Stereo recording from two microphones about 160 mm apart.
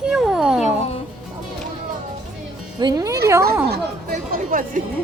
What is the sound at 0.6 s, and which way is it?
Speech, 40° left (ahead or behind).